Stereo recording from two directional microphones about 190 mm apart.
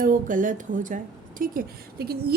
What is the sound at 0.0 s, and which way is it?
A woman's voice, 45° right (ahead or behind).